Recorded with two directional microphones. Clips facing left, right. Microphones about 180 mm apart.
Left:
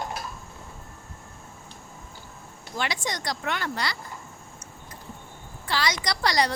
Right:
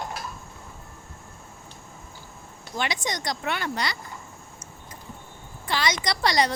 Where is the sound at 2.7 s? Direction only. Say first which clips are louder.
Right 1 dB; 20° right (ahead or behind).